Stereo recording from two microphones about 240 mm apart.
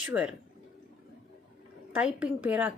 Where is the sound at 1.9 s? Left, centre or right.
Centre.